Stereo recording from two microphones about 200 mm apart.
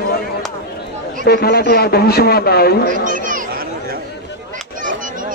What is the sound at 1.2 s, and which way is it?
Speech, 50° left (ahead or behind).